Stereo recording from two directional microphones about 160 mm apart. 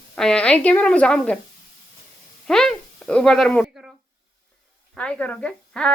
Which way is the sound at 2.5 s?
5° left (ahead or behind).